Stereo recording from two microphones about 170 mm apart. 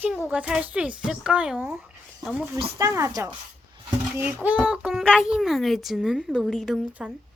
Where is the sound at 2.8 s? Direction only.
15° right (ahead or behind).